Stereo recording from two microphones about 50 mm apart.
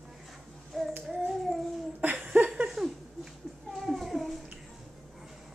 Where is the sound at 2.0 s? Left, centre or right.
Right.